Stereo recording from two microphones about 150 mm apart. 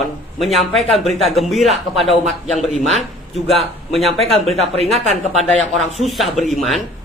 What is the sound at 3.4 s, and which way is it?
A man's voice, centre (ahead or behind).